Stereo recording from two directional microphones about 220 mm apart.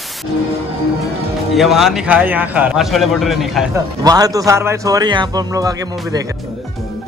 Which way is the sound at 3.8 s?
15° right (ahead or behind).